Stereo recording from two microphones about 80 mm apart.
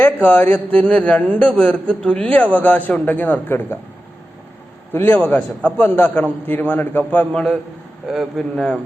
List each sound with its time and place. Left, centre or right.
0.0 s a man's voice: left
4.9 s a man's voice: left
5.2 s a man's voice: centre
7.3 s a man's voice: centre
8.0 s a man's voice: centre
8.5 s a man's voice: centre